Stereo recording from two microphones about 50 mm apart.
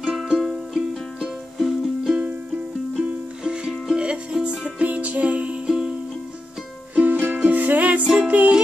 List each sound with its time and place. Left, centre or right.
0.1 s music: centre
7.0 s music: right